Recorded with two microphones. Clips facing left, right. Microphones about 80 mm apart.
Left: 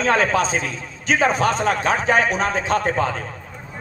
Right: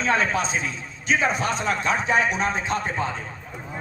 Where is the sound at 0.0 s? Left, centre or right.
Left.